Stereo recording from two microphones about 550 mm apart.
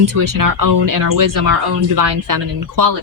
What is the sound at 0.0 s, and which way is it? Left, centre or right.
Speech, right.